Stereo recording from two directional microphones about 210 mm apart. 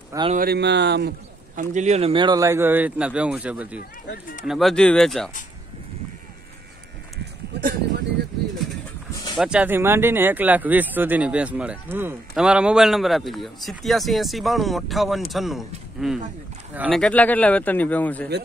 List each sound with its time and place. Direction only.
0.3 s speech: 45° right (ahead or behind)
1.6 s speech: 35° right (ahead or behind); by 3.8 s 5° right (ahead or behind)
4.1 s speech: 40° left (ahead or behind)
4.5 s speech: centre (ahead or behind)
7.5 s a sound: 50° right (ahead or behind)
9.1 s a sound: 20° left (ahead or behind)
9.4 s speech: 5° right (ahead or behind)
17.0 s a man's voice: 5° left (ahead or behind)